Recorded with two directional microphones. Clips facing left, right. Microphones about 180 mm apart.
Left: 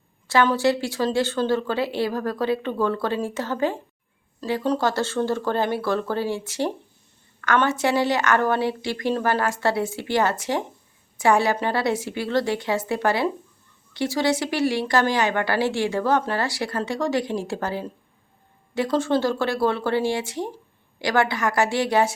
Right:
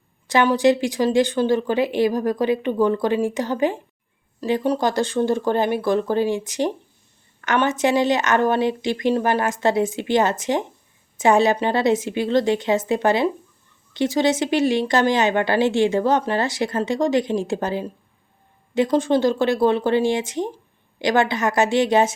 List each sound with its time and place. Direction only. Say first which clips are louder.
0.3 s speech: right 3 dB; 15° right (ahead or behind)